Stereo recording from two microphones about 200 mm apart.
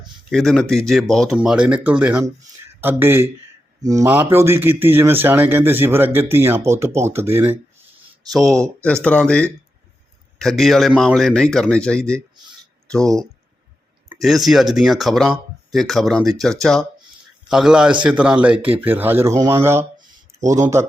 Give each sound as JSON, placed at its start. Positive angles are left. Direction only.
{"t": 0.3, "sound": "a man's voice", "side_deg": 0}
{"t": 8.3, "sound": "a man's voice", "side_deg": 0}